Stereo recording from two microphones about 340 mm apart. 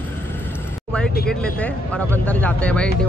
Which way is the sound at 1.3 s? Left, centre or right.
Centre.